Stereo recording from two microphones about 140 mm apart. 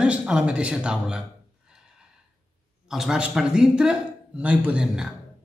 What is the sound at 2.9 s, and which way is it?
A man's voice, 5° right (ahead or behind).